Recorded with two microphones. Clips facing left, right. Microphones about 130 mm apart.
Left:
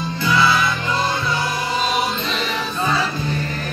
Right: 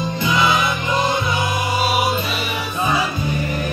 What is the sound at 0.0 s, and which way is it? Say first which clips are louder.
Music: even; 15° right (ahead or behind).